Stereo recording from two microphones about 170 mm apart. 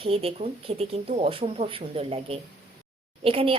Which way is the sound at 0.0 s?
35° right (ahead or behind).